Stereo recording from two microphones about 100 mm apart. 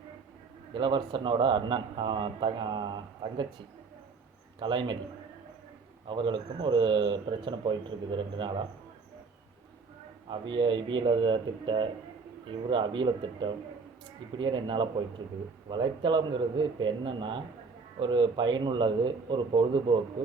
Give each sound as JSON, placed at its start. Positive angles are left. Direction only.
{"t": 0.7, "sound": "a man's voice", "side_deg": -55}
{"t": 4.6, "sound": "a man's voice", "side_deg": -55}
{"t": 6.1, "sound": "a man's voice", "side_deg": -55}
{"t": 10.2, "sound": "a man's voice", "side_deg": -50}